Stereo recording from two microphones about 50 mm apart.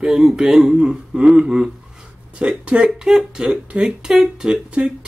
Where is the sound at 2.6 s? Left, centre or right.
Right.